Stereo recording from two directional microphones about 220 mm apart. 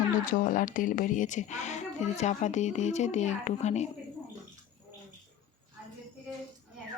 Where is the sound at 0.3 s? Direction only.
40° left (ahead or behind).